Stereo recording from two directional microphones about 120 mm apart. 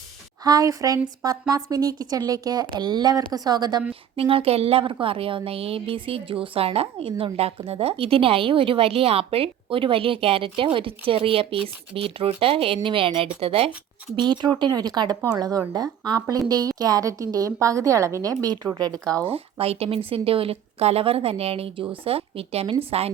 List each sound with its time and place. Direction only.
0.4 s a woman's voice: 30° right (ahead or behind)
4.2 s a woman's voice: 50° right (ahead or behind)
14.2 s a woman's voice: 35° right (ahead or behind)
19.3 s a woman's voice: 55° right (ahead or behind)